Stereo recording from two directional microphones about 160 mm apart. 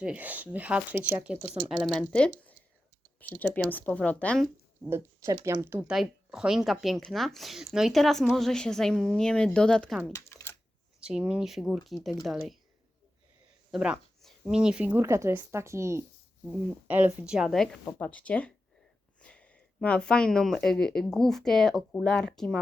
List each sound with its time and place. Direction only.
0.0 s speech: 10° right (ahead or behind)
1.9 s speech: 5° left (ahead or behind)
4.9 s speech: 15° right (ahead or behind)
5.6 s speech: 15° right (ahead or behind); by 10.0 s 5° left (ahead or behind)
10.1 s typing: 20° left (ahead or behind)
11.0 s speech: 5° right (ahead or behind)
13.7 s speech: 5° right (ahead or behind)